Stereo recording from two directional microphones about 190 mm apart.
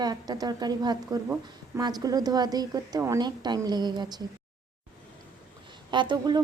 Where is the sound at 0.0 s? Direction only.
20° right (ahead or behind).